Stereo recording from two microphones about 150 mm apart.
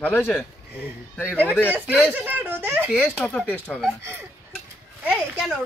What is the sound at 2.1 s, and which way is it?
Speech, 10° right (ahead or behind).